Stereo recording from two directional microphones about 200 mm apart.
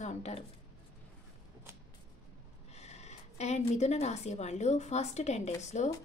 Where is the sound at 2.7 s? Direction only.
35° left (ahead or behind).